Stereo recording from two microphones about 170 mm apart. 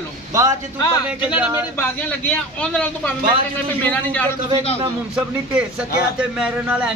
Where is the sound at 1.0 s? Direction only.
5° right (ahead or behind).